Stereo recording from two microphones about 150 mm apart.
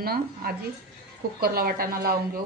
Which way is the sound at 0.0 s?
90° right.